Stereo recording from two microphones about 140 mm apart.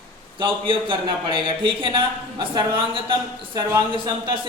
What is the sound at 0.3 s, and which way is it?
Speech, 40° right (ahead or behind).